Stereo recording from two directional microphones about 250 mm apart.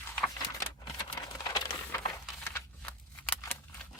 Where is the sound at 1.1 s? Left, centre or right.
Centre.